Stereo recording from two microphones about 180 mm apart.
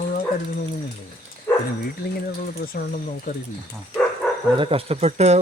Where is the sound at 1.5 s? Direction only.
15° left (ahead or behind).